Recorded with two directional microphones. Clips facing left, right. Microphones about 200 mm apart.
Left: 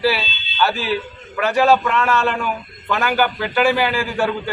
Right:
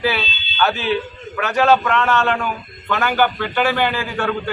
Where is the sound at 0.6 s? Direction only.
5° left (ahead or behind).